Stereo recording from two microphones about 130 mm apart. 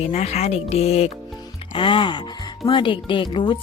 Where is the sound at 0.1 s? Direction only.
55° left (ahead or behind).